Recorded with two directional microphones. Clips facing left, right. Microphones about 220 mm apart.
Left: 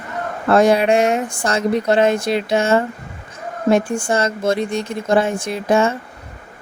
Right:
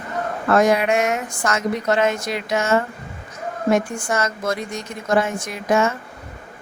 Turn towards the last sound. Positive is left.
turn(degrees=30)  # may be behind; listen again after turning